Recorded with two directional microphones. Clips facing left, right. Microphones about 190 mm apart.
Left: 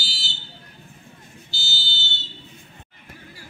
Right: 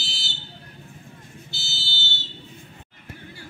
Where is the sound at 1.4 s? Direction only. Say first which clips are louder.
Left 5 dB; 65° right (ahead or behind).